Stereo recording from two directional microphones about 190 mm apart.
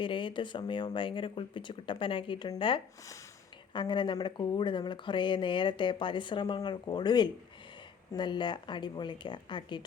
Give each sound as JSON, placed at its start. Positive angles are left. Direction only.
{"t": 0.0, "sound": "speech", "side_deg": 25}